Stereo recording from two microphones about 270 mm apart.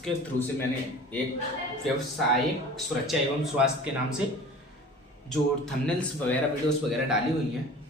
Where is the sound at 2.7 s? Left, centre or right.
Centre.